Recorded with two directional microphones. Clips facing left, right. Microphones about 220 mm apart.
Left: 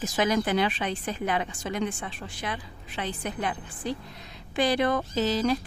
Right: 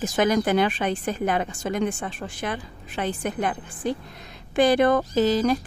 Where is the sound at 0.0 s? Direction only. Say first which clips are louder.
Right 4 dB; 50° right (ahead or behind).